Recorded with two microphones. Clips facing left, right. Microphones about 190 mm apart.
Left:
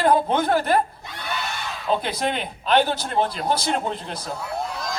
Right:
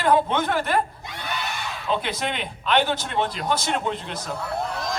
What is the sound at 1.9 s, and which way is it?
A man's voice, 35° left (ahead or behind).